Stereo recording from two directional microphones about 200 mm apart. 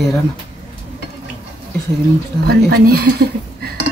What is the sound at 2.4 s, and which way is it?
Speech, 50° right (ahead or behind).